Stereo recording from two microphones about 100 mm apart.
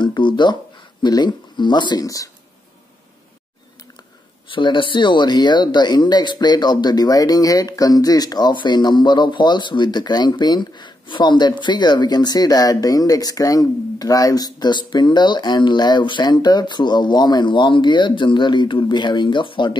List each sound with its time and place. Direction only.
0.0 s speech: 50° left (ahead or behind)
2.0 s speech: 35° left (ahead or behind)
4.5 s speech: 55° left (ahead or behind)